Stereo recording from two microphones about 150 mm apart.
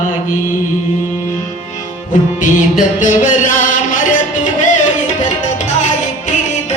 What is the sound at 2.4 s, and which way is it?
Music, 60° left (ahead or behind).